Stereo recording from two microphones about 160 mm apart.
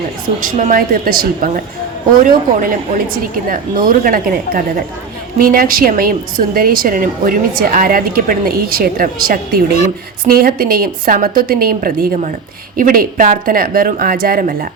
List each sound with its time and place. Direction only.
0.4 s a woman's voice: 60° right (ahead or behind)
2.6 s a woman's voice: 60° right (ahead or behind)